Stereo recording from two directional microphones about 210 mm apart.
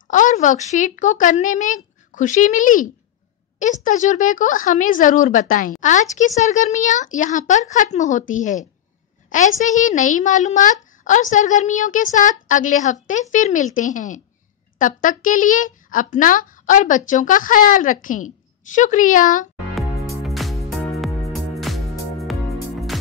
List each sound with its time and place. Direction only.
0.1 s a child's voice: 35° left (ahead or behind)
20.1 s music: centre (ahead or behind)